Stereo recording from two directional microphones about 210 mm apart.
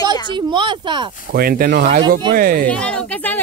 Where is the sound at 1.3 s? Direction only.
45° right (ahead or behind).